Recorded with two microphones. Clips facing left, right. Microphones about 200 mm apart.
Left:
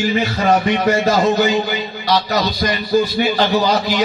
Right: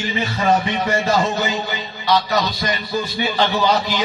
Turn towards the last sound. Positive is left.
turn(degrees=40)  # may be behind; listen again after turning